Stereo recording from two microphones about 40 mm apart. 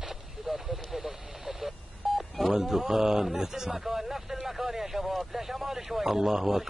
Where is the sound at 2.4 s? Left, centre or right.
Centre.